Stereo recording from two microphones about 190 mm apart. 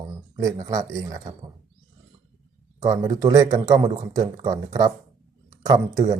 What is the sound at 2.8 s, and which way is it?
Speech, 15° right (ahead or behind).